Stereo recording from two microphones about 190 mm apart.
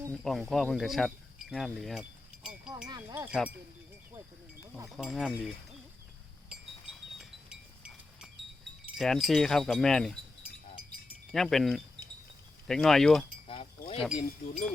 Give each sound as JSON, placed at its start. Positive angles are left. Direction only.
{"t": 0.1, "sound": "insect", "side_deg": 0}
{"t": 2.8, "sound": "wind chime", "side_deg": -20}
{"t": 3.2, "sound": "speech", "side_deg": -5}
{"t": 4.9, "sound": "speech", "side_deg": 0}
{"t": 7.2, "sound": "wind chime", "side_deg": -5}
{"t": 11.3, "sound": "speech", "side_deg": 0}
{"t": 13.5, "sound": "chink", "side_deg": 30}
{"t": 14.0, "sound": "speech", "side_deg": 0}